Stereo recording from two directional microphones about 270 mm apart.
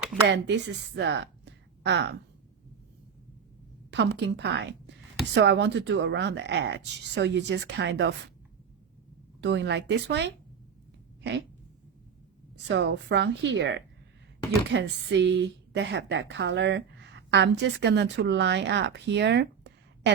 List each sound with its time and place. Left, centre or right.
0.3 s speech: right
3.9 s speech: right
9.4 s speech: right
11.2 s a sound: right
12.6 s a woman's voice: right